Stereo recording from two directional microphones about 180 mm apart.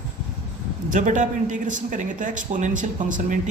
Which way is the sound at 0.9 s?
45° right (ahead or behind).